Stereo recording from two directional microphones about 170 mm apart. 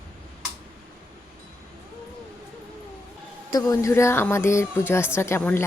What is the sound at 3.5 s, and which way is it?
Speech, 20° left (ahead or behind).